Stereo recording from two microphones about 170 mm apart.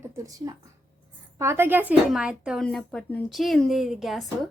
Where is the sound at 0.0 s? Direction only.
20° right (ahead or behind).